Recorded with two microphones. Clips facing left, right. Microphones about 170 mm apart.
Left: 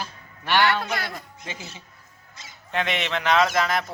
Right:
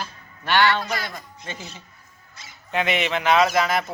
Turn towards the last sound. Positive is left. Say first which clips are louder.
# right 2 dB
turn(degrees=-5)  # may be behind; listen again after turning